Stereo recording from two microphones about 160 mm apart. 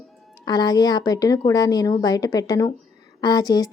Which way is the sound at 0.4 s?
25° left (ahead or behind).